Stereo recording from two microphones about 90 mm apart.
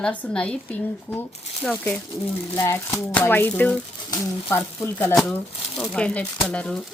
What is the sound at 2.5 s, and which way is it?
Speech, 35° left (ahead or behind).